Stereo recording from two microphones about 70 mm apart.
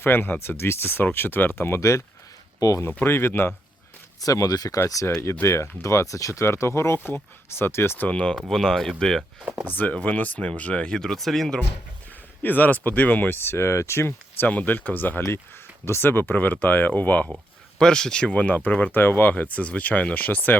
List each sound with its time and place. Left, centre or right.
0.0 s speech: left
1.8 s speech: left
3.0 s speech: left
4.2 s speech: left
5.2 s speech: left
6.4 s speech: left
8.0 s speech: centre
9.4 s speech: centre
9.6 s speech: left; by 11.6 s centre
12.4 s speech: left
14.4 s speech: left
17.7 s speech: centre